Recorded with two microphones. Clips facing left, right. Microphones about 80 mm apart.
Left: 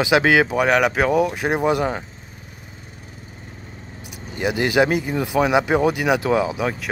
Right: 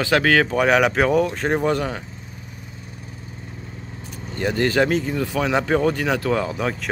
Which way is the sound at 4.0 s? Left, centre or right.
Centre.